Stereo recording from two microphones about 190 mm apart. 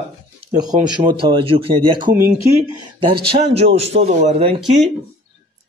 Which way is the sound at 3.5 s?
35° right (ahead or behind).